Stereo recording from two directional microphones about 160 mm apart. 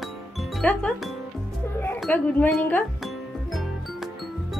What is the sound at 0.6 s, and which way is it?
Speech, 5° left (ahead or behind).